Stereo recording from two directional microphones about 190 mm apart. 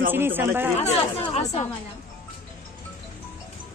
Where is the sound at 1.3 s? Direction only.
35° left (ahead or behind).